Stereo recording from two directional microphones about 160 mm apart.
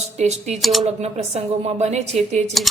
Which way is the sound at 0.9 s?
40° right (ahead or behind).